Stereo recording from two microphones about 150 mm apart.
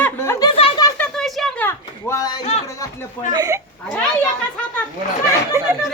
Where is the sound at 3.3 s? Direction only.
25° right (ahead or behind).